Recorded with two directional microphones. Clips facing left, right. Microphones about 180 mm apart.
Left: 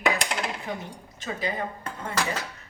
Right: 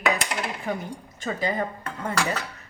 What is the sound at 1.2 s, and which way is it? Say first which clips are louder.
Speech: right 4 dB; 45° right (ahead or behind).